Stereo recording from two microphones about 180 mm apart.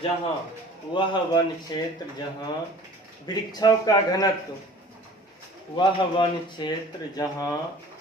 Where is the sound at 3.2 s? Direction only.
20° left (ahead or behind).